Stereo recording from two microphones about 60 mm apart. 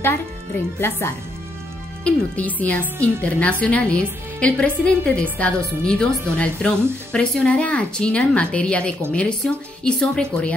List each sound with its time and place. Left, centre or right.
0.7 s a woman's voice: left
2.0 s a woman's voice: left